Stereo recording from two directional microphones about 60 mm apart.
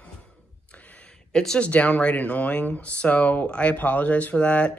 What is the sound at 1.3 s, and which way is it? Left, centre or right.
Speech, centre.